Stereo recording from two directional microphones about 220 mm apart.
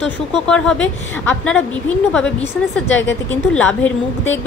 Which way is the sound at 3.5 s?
5° left (ahead or behind).